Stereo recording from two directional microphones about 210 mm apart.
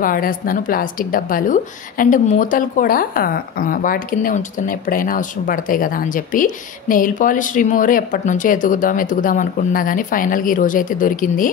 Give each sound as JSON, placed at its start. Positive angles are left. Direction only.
{"t": 0.0, "sound": "a woman's voice", "side_deg": 40}